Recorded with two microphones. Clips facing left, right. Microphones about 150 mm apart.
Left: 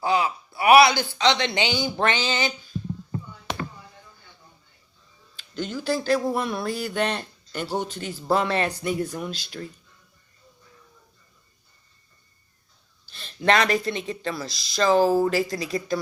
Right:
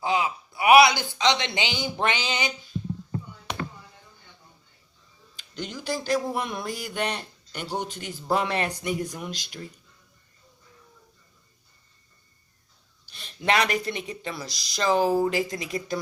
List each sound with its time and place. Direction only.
0.0 s speech: 20° right (ahead or behind)
5.4 s speech: 15° right (ahead or behind)
13.1 s a sound: 15° right (ahead or behind)
13.7 s speech: 15° right (ahead or behind)